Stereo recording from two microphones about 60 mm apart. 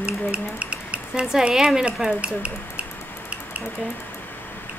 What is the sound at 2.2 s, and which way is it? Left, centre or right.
Speech, centre.